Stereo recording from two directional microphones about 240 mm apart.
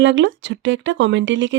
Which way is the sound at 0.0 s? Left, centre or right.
Right.